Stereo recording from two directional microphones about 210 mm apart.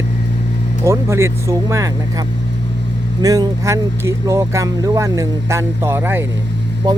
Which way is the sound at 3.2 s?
15° right (ahead or behind).